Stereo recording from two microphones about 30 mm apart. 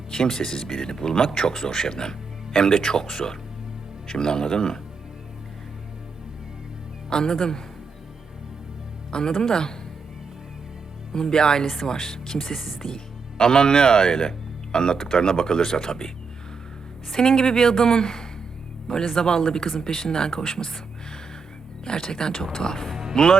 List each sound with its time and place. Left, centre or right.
0.1 s speech: left
7.1 s speech: left
9.1 s speech: left
11.1 s speech: left
17.1 s speech: left
21.8 s speech: left